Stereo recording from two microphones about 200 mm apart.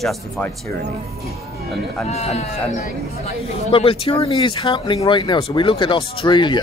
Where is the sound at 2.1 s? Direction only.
30° left (ahead or behind).